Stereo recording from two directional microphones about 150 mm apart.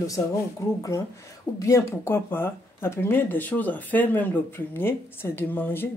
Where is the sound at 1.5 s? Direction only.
20° left (ahead or behind).